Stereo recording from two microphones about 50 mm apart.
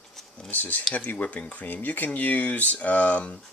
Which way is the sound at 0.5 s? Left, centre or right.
Left.